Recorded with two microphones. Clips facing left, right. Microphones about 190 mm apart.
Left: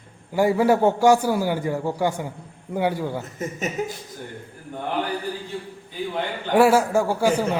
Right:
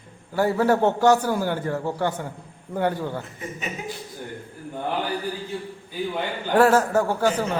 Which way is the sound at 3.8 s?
45° left (ahead or behind).